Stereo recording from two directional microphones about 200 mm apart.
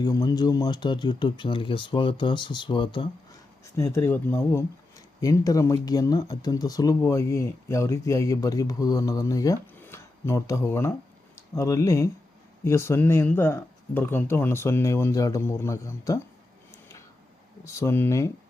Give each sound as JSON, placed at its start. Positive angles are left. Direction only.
{"t": 0.0, "sound": "speech", "side_deg": 20}
{"t": 17.6, "sound": "speech", "side_deg": 15}